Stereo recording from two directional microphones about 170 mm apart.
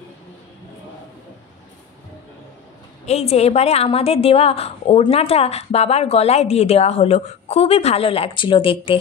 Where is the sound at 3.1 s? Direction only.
40° left (ahead or behind).